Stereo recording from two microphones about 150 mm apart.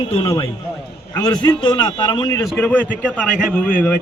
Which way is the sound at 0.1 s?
40° left (ahead or behind).